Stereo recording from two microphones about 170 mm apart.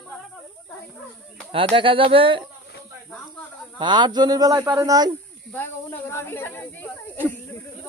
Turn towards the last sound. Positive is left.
turn(degrees=10)  # may be behind; listen again after turning